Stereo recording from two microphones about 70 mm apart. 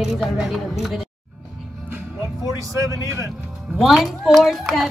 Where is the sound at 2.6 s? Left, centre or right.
Right.